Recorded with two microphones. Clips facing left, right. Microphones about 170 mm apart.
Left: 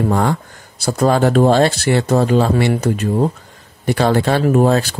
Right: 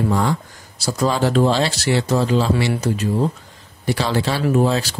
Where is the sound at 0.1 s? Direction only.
55° left (ahead or behind).